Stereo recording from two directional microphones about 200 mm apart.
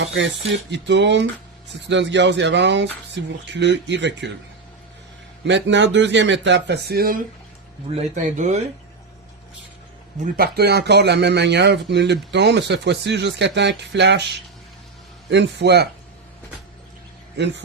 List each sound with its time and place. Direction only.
0.0 s speech: 65° right (ahead or behind)
5.5 s speech: 65° right (ahead or behind)
7.9 s speech: 40° right (ahead or behind)
10.3 s speech: 50° right (ahead or behind)